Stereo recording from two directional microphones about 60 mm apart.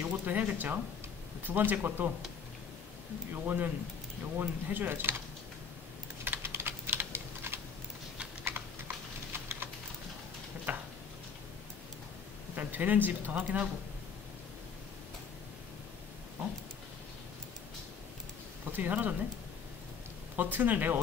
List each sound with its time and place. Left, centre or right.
0.0 s speech: right
3.4 s speech: right
6.2 s typing: right
10.7 s a sound: right
12.5 s speech: right
18.7 s speech: right
20.3 s speech: right